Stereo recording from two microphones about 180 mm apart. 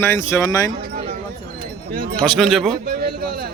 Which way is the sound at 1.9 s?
55° right (ahead or behind).